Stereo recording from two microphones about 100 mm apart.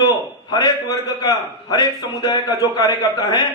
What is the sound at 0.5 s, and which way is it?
A man's voice, 45° left (ahead or behind).